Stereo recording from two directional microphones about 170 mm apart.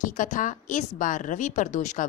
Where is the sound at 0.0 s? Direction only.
50° left (ahead or behind).